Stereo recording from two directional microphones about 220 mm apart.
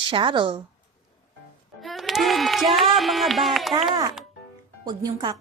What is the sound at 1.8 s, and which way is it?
Speech, centre (ahead or behind).